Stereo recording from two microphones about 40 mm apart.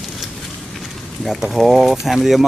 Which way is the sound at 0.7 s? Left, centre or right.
Centre.